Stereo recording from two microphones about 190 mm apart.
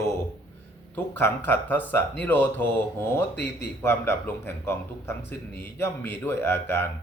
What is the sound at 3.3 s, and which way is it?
Speech, 65° left (ahead or behind).